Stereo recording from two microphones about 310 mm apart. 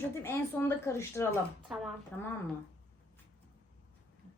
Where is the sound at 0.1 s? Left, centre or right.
Centre.